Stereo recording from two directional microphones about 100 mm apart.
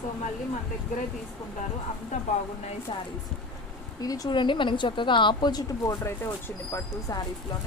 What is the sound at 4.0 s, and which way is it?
Speech, 40° left (ahead or behind).